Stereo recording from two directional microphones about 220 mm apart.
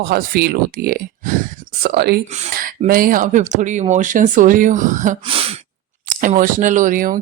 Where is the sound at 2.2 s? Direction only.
30° right (ahead or behind).